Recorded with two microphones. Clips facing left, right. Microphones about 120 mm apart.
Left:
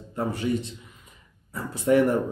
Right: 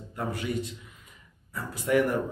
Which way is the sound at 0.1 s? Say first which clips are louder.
Left 5 dB; 30° left (ahead or behind).